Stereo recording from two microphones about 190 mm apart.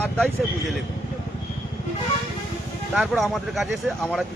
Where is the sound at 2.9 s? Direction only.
5° right (ahead or behind).